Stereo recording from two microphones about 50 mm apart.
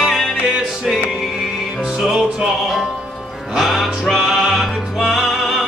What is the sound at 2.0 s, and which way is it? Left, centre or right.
Music, centre.